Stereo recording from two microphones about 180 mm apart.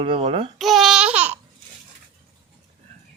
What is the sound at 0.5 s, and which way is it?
Babbling, centre (ahead or behind).